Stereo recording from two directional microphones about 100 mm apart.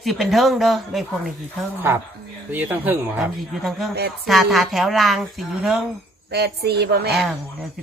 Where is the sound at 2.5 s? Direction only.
20° right (ahead or behind).